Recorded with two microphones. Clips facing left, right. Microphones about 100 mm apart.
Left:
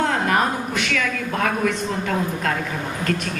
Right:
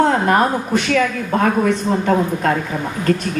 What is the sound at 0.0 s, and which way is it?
A woman's voice, 35° right (ahead or behind).